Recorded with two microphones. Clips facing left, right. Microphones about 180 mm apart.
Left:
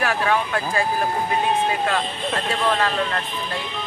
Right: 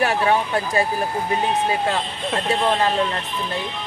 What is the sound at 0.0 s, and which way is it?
Speech, 25° right (ahead or behind).